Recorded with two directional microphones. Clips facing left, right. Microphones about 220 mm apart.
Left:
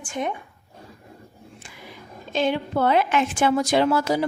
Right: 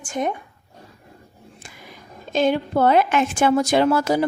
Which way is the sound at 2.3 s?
45° right (ahead or behind).